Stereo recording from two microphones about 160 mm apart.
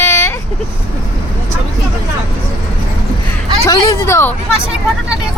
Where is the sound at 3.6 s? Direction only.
20° left (ahead or behind).